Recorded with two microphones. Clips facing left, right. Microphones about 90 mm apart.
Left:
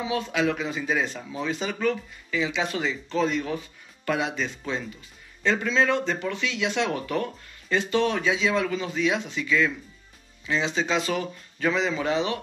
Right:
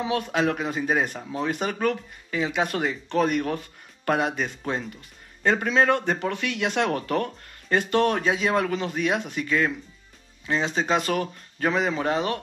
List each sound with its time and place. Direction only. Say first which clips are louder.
0.0 s speech: right 1 dB; 60° right (ahead or behind)
7.7 s speech: right 2 dB; 55° right (ahead or behind)